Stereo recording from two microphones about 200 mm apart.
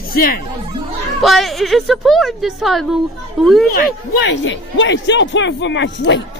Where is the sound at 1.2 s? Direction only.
Centre (ahead or behind).